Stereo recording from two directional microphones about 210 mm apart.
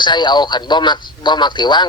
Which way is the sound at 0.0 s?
20° left (ahead or behind).